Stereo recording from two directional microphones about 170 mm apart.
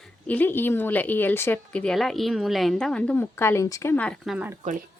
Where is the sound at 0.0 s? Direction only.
10° left (ahead or behind).